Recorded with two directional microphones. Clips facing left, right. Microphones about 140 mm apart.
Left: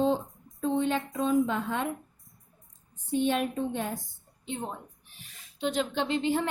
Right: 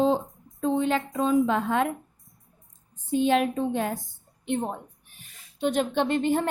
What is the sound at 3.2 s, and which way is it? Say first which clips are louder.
Speech: right 5 dB; 90° right.